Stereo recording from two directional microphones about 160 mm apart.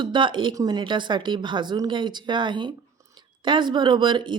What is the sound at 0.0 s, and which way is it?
A woman's voice, 30° right (ahead or behind).